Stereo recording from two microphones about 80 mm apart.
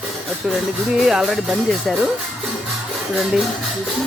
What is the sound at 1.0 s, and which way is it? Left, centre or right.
Speech, centre.